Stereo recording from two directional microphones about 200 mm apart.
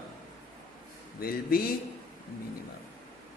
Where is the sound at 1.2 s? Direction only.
50° left (ahead or behind).